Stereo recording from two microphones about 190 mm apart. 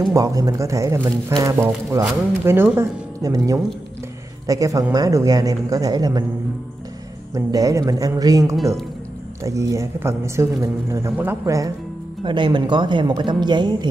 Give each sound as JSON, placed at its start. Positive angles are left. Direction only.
{"t": 0.1, "sound": "speech", "side_deg": -15}
{"t": 7.3, "sound": "speech", "side_deg": -15}